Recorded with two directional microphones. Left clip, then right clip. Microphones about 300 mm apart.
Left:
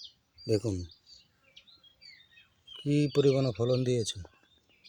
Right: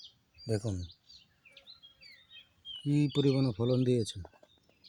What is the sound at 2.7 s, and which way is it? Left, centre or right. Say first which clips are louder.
Speech: left 4 dB; left.